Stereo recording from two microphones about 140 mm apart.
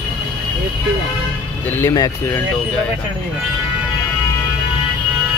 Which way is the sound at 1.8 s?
20° left (ahead or behind).